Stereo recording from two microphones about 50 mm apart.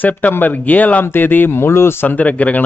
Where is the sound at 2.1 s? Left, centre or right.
Left.